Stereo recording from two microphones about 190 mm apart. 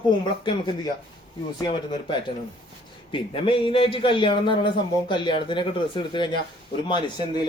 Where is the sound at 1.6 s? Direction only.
25° left (ahead or behind).